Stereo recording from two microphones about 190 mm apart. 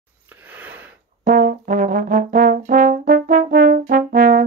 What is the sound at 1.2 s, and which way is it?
Brass instrument, 45° right (ahead or behind).